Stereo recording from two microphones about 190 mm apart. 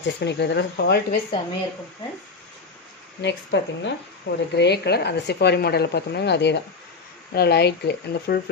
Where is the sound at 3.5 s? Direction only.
65° left (ahead or behind).